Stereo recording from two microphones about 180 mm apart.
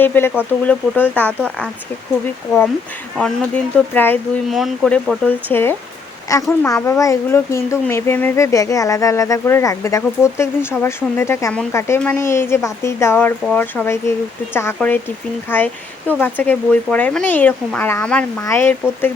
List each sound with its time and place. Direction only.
0.0 s speech: 10° left (ahead or behind)
3.2 s speech: 5° left (ahead or behind)
4.4 s speech: centre (ahead or behind)